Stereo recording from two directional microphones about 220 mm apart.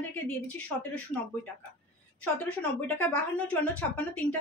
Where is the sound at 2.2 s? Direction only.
5° left (ahead or behind).